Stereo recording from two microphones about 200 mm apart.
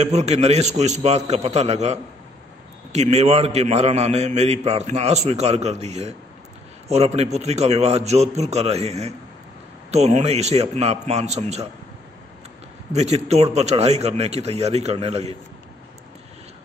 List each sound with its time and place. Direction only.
0.0 s a man's voice: 35° right (ahead or behind)
12.9 s a man's voice: 35° right (ahead or behind)